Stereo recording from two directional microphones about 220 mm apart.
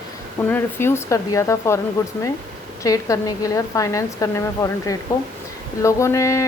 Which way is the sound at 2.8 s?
15° left (ahead or behind).